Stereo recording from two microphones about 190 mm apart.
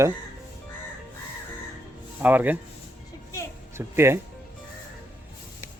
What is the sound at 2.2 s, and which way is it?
Speech, 10° right (ahead or behind).